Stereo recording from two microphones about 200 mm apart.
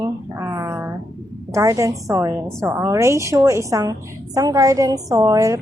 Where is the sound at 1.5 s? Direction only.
15° right (ahead or behind).